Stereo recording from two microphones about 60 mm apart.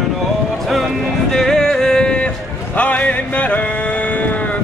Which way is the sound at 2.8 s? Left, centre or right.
Left.